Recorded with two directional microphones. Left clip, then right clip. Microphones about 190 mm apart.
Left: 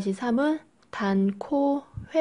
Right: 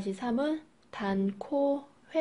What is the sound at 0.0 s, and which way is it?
Speech, 35° left (ahead or behind).